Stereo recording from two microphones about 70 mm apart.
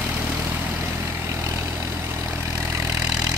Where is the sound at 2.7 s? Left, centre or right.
Right.